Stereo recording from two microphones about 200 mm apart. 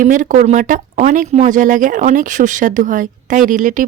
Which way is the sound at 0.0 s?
40° right (ahead or behind).